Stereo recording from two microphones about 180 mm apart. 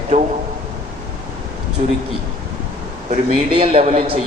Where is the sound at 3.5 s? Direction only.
30° right (ahead or behind).